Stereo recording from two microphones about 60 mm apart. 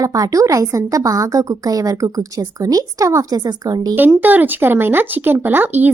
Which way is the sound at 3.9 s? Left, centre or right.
Right.